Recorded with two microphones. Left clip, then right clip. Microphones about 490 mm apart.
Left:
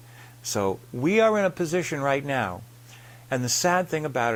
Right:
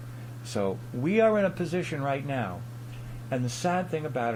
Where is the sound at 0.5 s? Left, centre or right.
Left.